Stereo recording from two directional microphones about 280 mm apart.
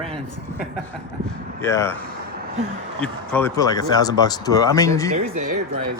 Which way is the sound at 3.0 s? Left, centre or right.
Centre.